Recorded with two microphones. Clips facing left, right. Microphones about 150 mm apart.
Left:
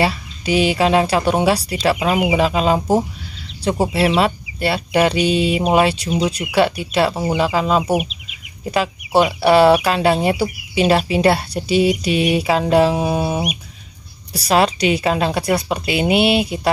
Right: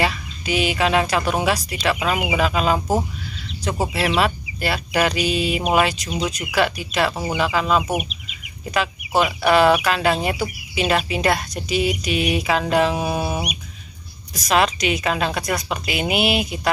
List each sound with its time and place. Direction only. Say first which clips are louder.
0.0 s speech: left 4 dB; 30° left (ahead or behind)